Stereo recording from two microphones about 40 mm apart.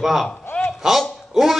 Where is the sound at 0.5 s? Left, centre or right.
Left.